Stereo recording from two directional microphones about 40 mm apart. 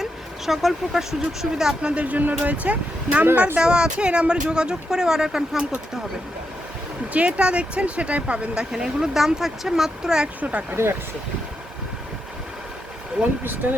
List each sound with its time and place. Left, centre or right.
0.0 s speech: centre
1.8 s speech: right
3.6 s speech: right
7.1 s speech: right
8.5 s speech: centre
10.4 s speech: right
13.6 s speech: right